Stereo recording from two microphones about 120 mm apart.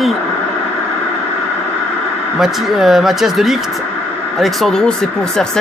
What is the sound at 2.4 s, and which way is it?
A man's voice, centre (ahead or behind).